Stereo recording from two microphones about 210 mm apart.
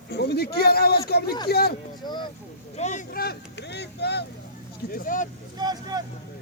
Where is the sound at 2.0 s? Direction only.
20° left (ahead or behind).